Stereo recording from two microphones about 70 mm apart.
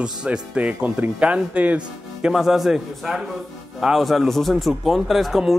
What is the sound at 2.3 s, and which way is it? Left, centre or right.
Speech, centre.